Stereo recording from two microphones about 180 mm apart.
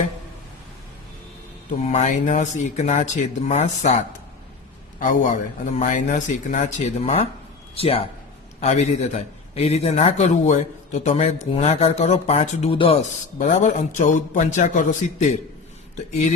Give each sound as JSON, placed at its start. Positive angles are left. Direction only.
{"t": 1.8, "sound": "a man's voice", "side_deg": 40}